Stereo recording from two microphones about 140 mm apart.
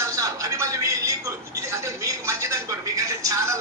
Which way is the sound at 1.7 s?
20° right (ahead or behind).